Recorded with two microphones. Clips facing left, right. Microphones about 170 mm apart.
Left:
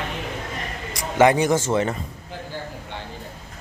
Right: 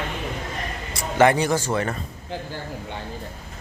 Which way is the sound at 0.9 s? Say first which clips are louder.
Left 1 dB; 15° left (ahead or behind).